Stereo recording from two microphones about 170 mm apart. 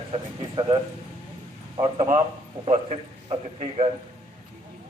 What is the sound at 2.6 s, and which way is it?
Speech, 40° right (ahead or behind).